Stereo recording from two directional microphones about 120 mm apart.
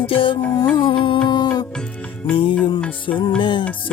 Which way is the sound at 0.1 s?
45° left (ahead or behind).